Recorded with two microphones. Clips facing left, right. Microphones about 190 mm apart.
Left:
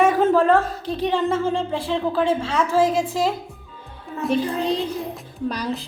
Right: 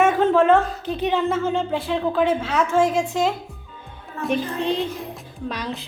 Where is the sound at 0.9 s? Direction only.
30° left (ahead or behind).